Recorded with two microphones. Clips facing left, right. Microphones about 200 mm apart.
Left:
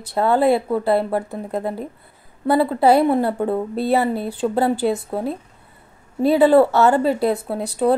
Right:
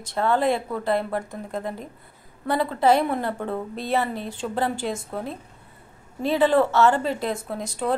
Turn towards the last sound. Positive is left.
turn(degrees=35)  # may be behind; listen again after turning